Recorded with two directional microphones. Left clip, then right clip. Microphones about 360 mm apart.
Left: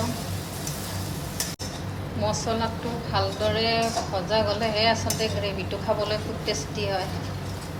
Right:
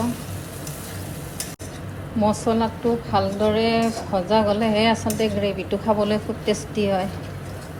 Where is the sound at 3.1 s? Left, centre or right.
Centre.